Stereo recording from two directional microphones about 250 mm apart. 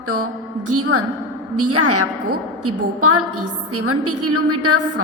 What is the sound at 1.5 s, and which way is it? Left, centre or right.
A woman's voice, right.